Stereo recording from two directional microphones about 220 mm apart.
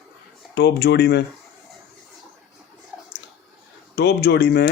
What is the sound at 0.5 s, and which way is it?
Speech, 50° left (ahead or behind).